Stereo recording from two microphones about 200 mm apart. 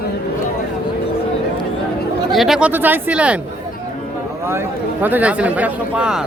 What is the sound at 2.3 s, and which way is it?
Speech, centre (ahead or behind).